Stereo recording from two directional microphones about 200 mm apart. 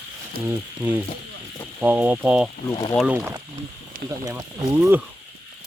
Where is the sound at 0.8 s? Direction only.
10° right (ahead or behind).